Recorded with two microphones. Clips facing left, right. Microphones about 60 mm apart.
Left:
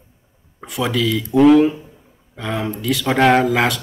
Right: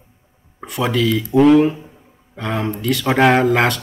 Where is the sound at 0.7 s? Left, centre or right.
Centre.